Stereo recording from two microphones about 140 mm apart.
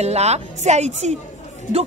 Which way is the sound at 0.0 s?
50° right (ahead or behind).